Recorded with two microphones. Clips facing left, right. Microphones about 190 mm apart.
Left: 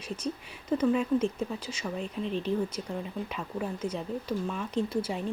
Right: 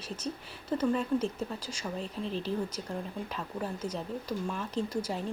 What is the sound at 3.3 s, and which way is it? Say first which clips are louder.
Speech: left 1 dB; 10° left (ahead or behind).